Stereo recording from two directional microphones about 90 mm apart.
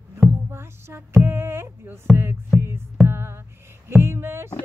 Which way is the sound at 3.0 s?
25° right (ahead or behind).